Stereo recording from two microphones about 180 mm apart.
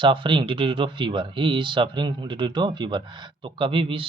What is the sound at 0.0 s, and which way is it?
Speech, 30° right (ahead or behind).